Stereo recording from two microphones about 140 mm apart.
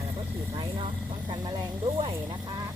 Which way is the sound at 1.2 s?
30° right (ahead or behind).